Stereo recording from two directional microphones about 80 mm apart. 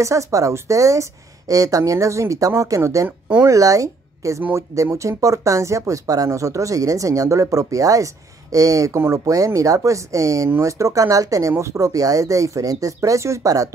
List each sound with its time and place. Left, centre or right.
0.0 s speech: right